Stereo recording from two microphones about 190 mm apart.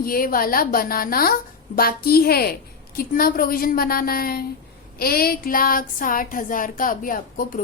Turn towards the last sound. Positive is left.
turn(degrees=45)  # may be behind; listen again after turning